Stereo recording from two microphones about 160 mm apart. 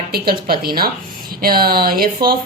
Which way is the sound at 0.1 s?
75° right (ahead or behind).